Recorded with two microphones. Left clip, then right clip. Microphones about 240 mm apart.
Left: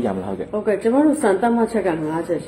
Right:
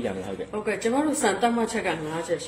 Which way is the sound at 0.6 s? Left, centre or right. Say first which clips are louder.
Left 8 dB; right.